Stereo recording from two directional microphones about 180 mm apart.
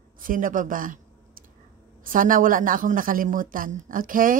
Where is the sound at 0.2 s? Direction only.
50° right (ahead or behind).